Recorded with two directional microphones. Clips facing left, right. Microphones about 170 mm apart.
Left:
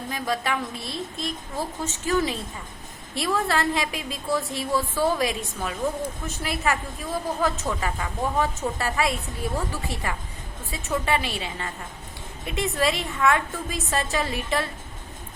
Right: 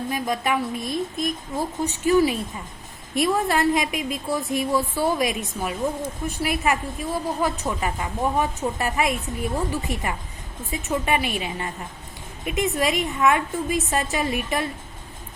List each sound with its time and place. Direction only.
0.1 s a woman's voice: 15° right (ahead or behind)
6.4 s a woman's voice: 15° right (ahead or behind)